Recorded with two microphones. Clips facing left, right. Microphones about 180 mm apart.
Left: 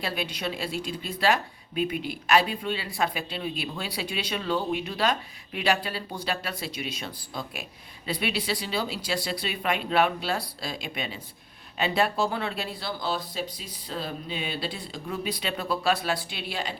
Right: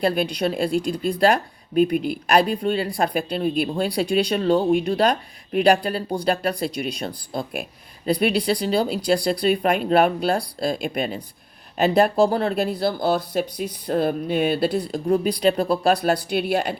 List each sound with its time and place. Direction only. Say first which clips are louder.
0.0 s speech: right 10 dB; 45° right (ahead or behind)
15.0 s speech: right 12 dB; 35° right (ahead or behind)
15.8 s speech: right 7 dB; 50° right (ahead or behind)